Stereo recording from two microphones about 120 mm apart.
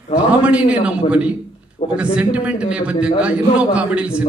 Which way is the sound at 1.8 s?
55° left (ahead or behind).